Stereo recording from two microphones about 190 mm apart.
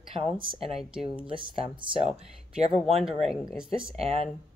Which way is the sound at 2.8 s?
Centre (ahead or behind).